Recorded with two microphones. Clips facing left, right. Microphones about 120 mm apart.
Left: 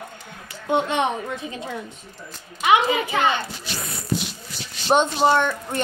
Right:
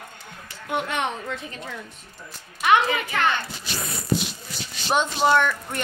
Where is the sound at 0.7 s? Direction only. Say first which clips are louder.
Left 5 dB; 25° left (ahead or behind).